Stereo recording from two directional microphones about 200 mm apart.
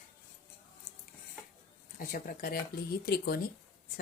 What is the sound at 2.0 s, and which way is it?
A woman's voice, 45° left (ahead or behind).